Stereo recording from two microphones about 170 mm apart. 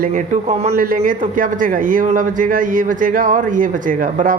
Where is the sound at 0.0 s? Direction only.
50° right (ahead or behind).